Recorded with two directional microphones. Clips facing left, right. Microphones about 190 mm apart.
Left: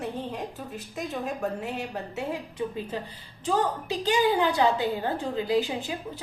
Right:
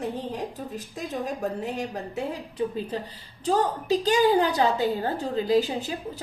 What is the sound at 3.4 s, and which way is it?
A woman's voice, 40° right (ahead or behind).